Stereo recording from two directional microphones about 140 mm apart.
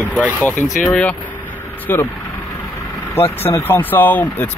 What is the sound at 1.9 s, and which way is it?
Speech, 15° left (ahead or behind).